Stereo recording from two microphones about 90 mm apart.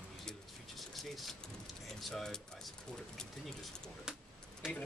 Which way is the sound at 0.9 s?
Centre (ahead or behind).